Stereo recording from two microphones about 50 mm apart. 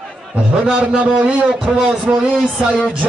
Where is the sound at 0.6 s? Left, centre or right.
Centre.